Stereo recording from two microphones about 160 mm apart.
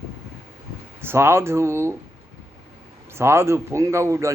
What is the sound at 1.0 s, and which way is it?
Speech, 15° right (ahead or behind).